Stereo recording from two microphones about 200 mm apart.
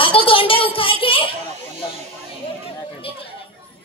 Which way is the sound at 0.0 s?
25° left (ahead or behind).